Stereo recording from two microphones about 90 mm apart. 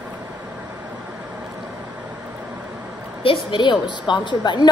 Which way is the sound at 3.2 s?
70° left (ahead or behind).